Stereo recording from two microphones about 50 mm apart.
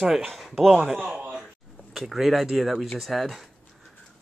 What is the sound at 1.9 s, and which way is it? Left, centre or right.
Speech, centre.